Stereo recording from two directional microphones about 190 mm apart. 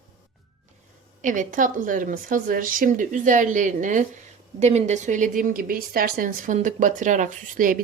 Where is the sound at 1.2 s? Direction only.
40° right (ahead or behind).